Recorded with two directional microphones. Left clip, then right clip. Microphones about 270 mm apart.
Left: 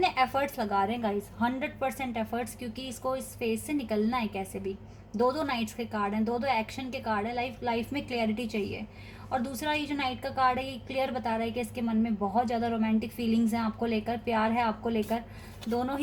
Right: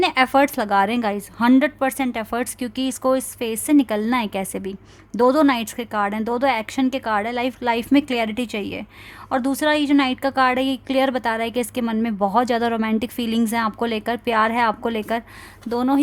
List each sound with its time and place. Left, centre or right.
0.0 s a woman's voice: right